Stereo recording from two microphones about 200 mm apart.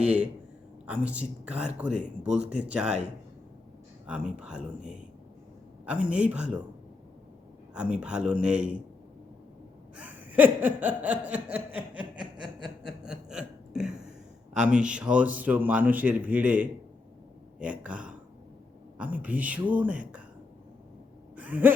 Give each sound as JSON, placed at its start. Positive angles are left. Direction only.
{"t": 0.9, "sound": "a man's voice", "side_deg": -5}
{"t": 2.0, "sound": "speech", "side_deg": -35}
{"t": 2.4, "sound": "a man's voice", "side_deg": -5}
{"t": 4.0, "sound": "a man's voice", "side_deg": -5}
{"t": 7.7, "sound": "a man's voice", "side_deg": -5}
{"t": 10.0, "sound": "a sound", "side_deg": -10}
{"t": 14.5, "sound": "a man's voice", "side_deg": -5}
{"t": 21.3, "sound": "a sound", "side_deg": -10}